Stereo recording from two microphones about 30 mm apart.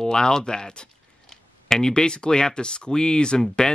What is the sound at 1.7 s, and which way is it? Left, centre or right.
Speech, left.